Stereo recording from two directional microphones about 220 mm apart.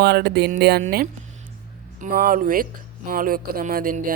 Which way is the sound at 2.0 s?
40° right (ahead or behind).